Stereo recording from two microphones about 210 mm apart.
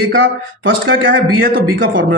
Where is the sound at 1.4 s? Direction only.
45° right (ahead or behind).